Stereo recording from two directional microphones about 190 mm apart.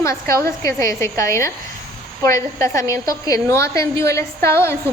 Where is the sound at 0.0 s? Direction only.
15° left (ahead or behind).